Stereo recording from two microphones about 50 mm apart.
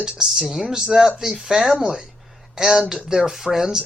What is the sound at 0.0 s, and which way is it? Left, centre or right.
Speech, centre.